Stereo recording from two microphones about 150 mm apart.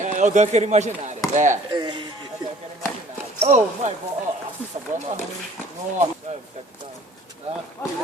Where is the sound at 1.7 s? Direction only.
30° right (ahead or behind).